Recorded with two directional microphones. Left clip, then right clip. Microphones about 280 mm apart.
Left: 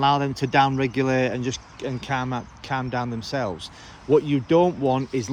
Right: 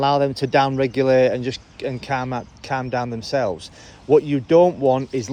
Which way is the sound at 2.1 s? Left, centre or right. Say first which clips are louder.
Right 2 dB; left.